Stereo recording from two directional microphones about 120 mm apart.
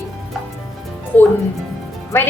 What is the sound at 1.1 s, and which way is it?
Speech, 15° left (ahead or behind).